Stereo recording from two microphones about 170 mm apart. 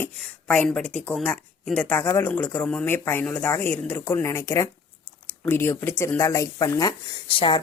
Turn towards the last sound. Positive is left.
turn(degrees=30)  # may be behind; listen again after turning